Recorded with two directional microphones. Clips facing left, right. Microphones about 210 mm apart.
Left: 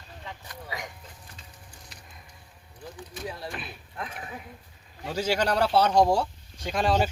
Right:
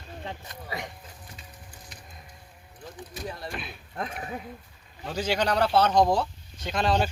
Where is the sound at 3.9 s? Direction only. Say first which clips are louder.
Right 4 dB; 40° right (ahead or behind).